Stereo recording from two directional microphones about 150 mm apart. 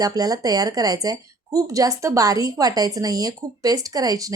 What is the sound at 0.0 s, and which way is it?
A woman's voice, 25° right (ahead or behind).